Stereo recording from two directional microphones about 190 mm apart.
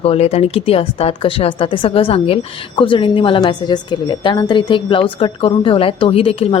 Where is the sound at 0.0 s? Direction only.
30° left (ahead or behind).